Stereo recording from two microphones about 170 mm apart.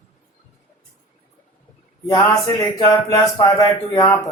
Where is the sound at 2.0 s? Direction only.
20° left (ahead or behind).